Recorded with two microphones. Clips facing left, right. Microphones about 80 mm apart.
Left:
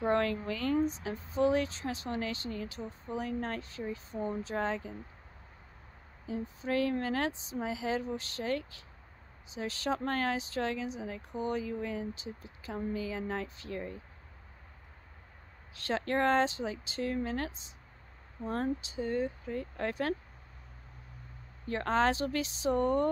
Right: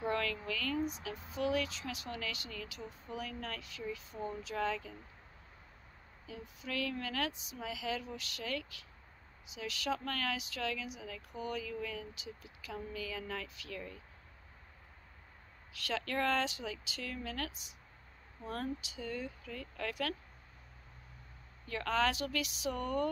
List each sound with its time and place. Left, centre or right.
0.0 s speech: left
6.2 s speech: left
15.7 s speech: left
21.6 s speech: left